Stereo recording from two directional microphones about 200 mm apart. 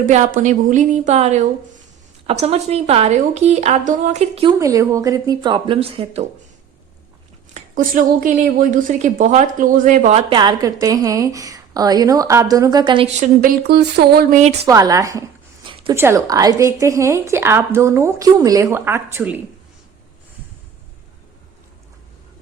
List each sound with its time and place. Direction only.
0.0 s a woman's voice: 40° right (ahead or behind)
4.6 s a woman's voice: 15° right (ahead or behind)
7.5 s a woman's voice: 40° right (ahead or behind); by 13.1 s 20° right (ahead or behind)
13.1 s speech: 40° right (ahead or behind)
14.7 s a woman's voice: 15° right (ahead or behind)
15.6 s a sound: 25° right (ahead or behind)
16.0 s a woman's voice: 15° right (ahead or behind)